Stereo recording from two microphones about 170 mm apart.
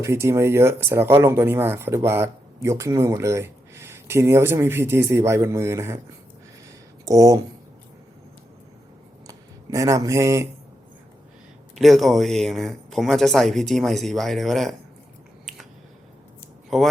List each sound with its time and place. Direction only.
0.0 s speech: 15° right (ahead or behind)
7.0 s speech: 20° right (ahead or behind)
9.2 s a sound: 20° right (ahead or behind)
11.8 s speech: centre (ahead or behind)
16.6 s speech: centre (ahead or behind)